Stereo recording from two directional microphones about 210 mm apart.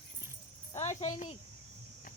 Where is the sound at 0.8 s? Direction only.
30° left (ahead or behind).